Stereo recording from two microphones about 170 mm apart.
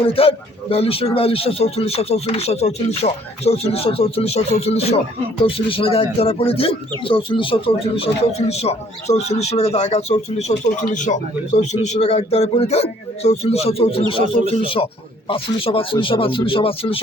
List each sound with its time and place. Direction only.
0.1 s speech: 35° left (ahead or behind)